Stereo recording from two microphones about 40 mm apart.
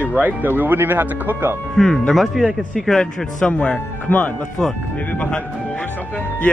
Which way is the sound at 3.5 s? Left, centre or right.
Left.